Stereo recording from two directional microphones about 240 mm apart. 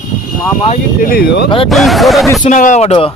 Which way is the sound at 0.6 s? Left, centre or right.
Left.